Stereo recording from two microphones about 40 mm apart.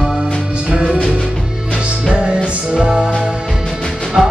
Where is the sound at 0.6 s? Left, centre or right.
Right.